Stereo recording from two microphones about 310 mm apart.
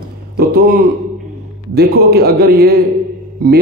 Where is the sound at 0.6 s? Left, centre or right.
Right.